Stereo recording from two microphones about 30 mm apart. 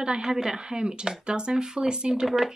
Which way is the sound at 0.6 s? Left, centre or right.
Right.